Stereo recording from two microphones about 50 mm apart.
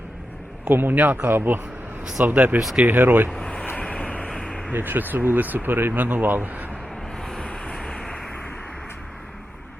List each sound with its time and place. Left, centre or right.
0.6 s a man's voice: right
0.9 s speech: right
1.3 s speech: right
2.2 s speech: right
3.3 s a sound: centre
3.8 s vehicle: left
4.7 s speech: right
7.2 s vehicle: centre